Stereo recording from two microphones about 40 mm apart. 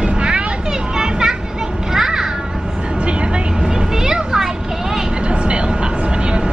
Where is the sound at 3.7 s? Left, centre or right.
Centre.